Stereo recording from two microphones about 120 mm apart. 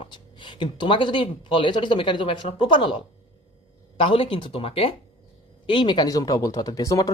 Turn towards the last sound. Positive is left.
turn(degrees=30)  # may be behind; listen again after turning